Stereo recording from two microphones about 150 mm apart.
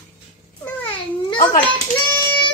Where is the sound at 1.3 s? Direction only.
70° left (ahead or behind).